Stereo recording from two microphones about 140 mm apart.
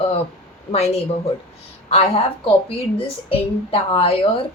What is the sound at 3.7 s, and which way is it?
Speech, 40° left (ahead or behind).